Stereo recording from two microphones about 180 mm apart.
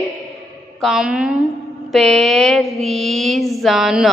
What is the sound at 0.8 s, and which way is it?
A woman's voice, centre (ahead or behind).